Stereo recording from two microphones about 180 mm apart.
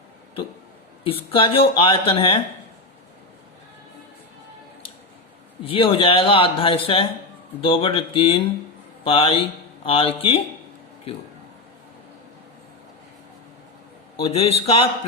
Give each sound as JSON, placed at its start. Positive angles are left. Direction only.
{"t": 1.0, "sound": "a man's voice", "side_deg": 30}
{"t": 5.6, "sound": "a man's voice", "side_deg": 30}
{"t": 14.2, "sound": "a man's voice", "side_deg": 35}